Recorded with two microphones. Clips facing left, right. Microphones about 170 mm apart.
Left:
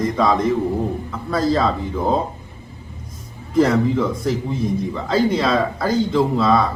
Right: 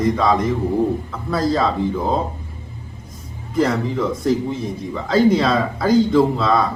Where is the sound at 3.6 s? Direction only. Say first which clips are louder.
Left 3 dB; centre (ahead or behind).